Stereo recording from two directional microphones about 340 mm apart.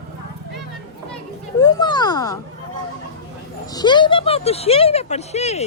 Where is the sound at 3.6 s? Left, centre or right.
Centre.